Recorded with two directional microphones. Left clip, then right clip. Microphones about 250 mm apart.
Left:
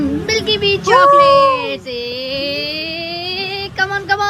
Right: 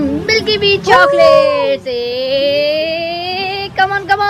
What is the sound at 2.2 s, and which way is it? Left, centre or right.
Music, centre.